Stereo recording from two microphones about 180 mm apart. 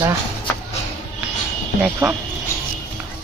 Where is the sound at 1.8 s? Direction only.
10° right (ahead or behind).